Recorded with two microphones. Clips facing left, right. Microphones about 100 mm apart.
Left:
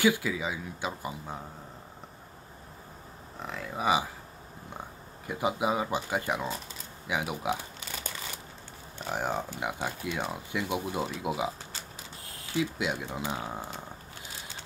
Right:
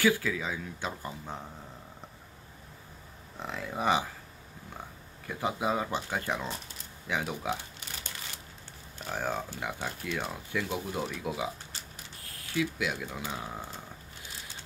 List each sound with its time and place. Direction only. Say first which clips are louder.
0.0 s speech: left 1 dB; 15° left (ahead or behind)
3.4 s speech: even; centre (ahead or behind)
5.2 s speech: left 2 dB; 15° left (ahead or behind)
8.9 s speech: left 2 dB; 20° left (ahead or behind)